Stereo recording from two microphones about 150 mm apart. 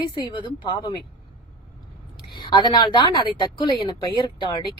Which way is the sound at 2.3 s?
30° left (ahead or behind).